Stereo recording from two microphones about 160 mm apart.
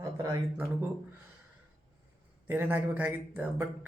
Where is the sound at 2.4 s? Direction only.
10° right (ahead or behind).